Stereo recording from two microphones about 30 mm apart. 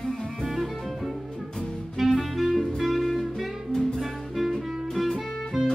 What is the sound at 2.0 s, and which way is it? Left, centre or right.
Clarinet, centre.